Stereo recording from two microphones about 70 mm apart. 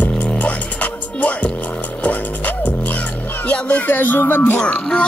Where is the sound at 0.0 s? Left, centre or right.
Left.